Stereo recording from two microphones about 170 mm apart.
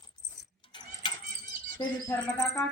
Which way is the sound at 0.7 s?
30° left (ahead or behind).